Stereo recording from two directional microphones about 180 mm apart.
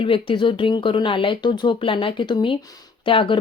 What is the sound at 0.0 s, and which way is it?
Speech, 30° left (ahead or behind).